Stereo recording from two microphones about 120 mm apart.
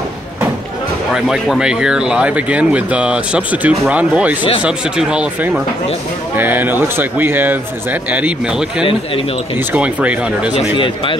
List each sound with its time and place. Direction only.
1.1 s speech: 5° right (ahead or behind)